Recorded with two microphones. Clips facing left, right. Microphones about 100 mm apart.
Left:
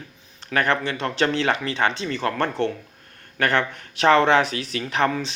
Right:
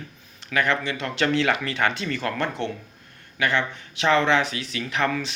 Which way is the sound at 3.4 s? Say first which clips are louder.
Left 2 dB; 50° left (ahead or behind).